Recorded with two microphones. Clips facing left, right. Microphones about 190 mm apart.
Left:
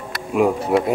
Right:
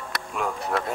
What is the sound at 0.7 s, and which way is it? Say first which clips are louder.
Speech: left 8 dB; 10° left (ahead or behind).